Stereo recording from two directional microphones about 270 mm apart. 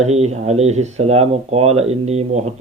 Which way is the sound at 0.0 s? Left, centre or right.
Right.